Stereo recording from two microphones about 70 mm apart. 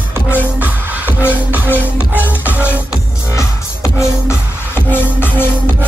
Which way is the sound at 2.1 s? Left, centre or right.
Right.